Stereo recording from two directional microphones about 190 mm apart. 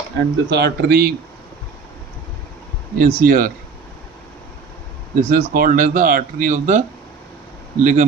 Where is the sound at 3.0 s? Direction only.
45° right (ahead or behind).